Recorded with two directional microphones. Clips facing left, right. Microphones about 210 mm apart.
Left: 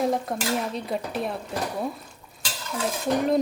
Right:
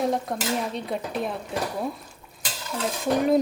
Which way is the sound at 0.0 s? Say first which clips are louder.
Even; centre (ahead or behind).